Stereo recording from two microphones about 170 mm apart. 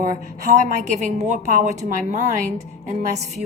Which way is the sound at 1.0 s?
45° right (ahead or behind).